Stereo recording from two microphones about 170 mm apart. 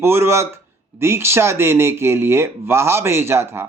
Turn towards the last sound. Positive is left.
turn(degrees=-15)  # may be behind; listen again after turning